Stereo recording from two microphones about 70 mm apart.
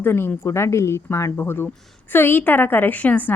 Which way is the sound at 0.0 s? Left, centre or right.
Left.